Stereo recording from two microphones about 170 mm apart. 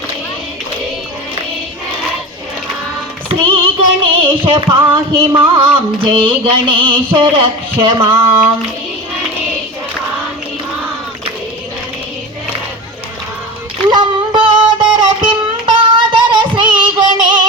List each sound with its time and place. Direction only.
3.2 s female singing: 30° right (ahead or behind)
4.4 s music: 30° right (ahead or behind)
8.1 s speech: 15° right (ahead or behind)
13.9 s a sound: 30° right (ahead or behind)
14.9 s music: 30° right (ahead or behind)